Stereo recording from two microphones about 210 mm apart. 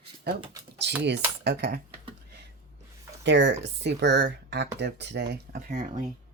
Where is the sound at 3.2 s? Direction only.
55° right (ahead or behind); by 6.0 s 40° right (ahead or behind).